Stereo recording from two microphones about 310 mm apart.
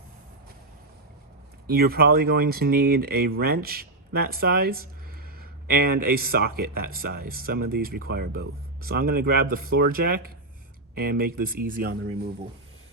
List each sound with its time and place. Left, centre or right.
1.6 s speech: right